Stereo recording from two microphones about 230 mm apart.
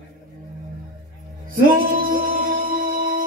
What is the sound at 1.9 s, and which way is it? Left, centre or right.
Music, right.